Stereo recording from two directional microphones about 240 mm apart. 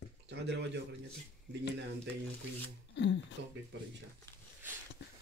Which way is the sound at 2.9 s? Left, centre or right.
Left.